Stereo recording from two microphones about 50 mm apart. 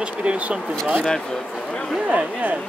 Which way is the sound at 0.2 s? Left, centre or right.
Right.